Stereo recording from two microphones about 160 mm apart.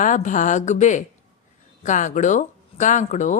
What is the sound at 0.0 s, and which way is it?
Speech, 55° left (ahead or behind).